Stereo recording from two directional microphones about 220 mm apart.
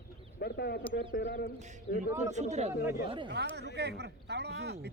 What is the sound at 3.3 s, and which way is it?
Speech, 50° right (ahead or behind).